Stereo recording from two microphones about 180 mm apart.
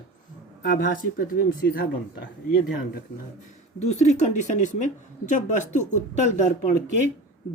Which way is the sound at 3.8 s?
40° left (ahead or behind).